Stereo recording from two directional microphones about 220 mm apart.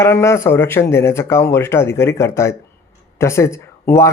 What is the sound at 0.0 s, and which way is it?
Speech, 10° left (ahead or behind).